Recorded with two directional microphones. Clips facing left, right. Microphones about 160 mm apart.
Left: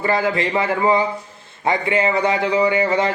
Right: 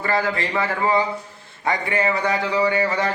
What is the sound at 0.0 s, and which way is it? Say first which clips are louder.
A man's voice: left 3 dB; 20° left (ahead or behind).